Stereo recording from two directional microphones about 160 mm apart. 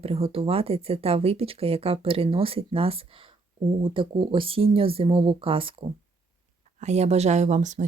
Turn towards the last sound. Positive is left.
turn(degrees=-50)  # may be behind; listen again after turning